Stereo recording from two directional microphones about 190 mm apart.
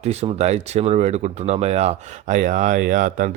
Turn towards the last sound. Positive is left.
turn(degrees=-45)  # may be behind; listen again after turning